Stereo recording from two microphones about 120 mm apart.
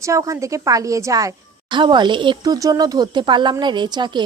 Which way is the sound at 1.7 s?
40° right (ahead or behind).